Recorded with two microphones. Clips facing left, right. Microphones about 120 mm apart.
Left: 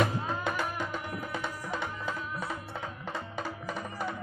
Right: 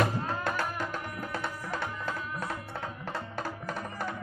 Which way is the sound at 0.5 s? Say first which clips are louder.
Even; centre (ahead or behind).